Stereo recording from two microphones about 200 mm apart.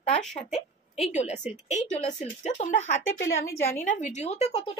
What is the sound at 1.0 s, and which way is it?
Speech, 35° left (ahead or behind).